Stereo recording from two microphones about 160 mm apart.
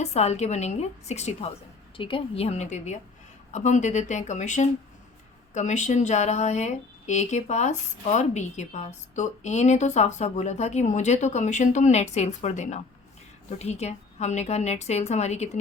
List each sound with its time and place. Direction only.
0.0 s speech: 45° left (ahead or behind)